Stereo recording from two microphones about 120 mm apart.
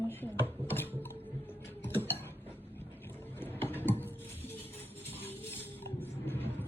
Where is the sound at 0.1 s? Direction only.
15° left (ahead or behind).